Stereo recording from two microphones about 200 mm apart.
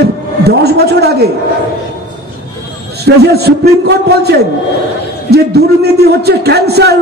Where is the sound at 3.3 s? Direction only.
55° right (ahead or behind).